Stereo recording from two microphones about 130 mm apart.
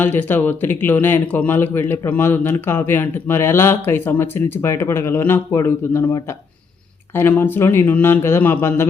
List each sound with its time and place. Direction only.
0.0 s a man's voice: 15° left (ahead or behind)
7.2 s a man's voice: 15° left (ahead or behind)